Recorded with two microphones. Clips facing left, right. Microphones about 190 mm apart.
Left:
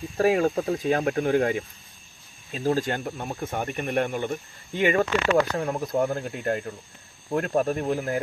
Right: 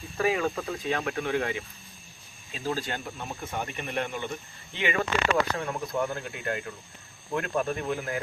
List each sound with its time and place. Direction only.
0.2 s speech: 45° left (ahead or behind)